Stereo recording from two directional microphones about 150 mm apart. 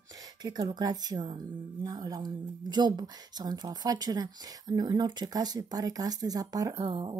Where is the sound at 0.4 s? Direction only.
30° right (ahead or behind).